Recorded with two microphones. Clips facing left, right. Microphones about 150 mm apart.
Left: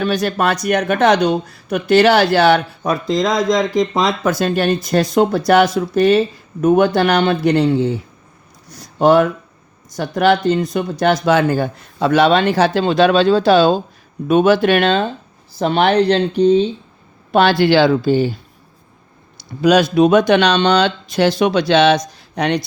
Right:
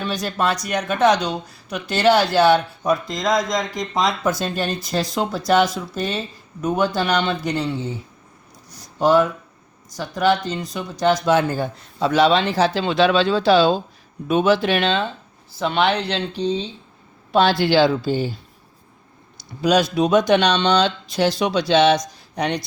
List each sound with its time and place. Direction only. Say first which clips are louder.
0.0 s speech: left 5 dB; 65° left (ahead or behind)
8.7 s a sound: left 4 dB; 65° left (ahead or behind)
9.9 s speech: left 5 dB; 65° left (ahead or behind)
11.0 s speech: left 3 dB; 75° left (ahead or behind)
12.8 s speech: left 5 dB; 45° left (ahead or behind)
17.3 s speech: left 4 dB; 65° left (ahead or behind)
19.6 s speech: left 6 dB; 65° left (ahead or behind)